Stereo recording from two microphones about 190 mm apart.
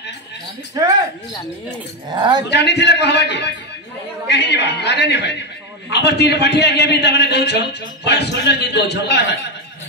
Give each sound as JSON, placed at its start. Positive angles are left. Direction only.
{"t": 2.0, "sound": "speech", "side_deg": -25}
{"t": 2.5, "sound": "a man's voice", "side_deg": 60}